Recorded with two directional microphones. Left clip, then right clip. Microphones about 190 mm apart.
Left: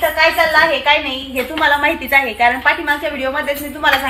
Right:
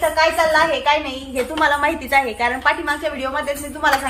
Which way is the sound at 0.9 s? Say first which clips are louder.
Left 4 dB; 15° right (ahead or behind).